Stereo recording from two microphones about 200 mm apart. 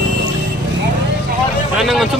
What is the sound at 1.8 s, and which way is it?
Speech, centre (ahead or behind).